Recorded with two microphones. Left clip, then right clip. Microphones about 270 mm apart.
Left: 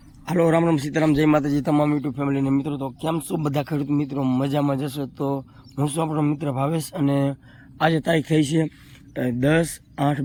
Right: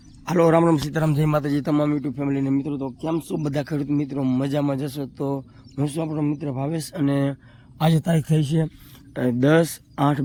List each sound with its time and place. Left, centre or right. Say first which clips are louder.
0.3 s speech: right 2 dB; centre
1.5 s a man's voice: left 1 dB; centre
3.4 s a man's voice: left 1 dB; centre
7.8 s a man's voice: left 3 dB; right
8.3 s speech: left 4 dB; right
9.1 s speech: right 2 dB; centre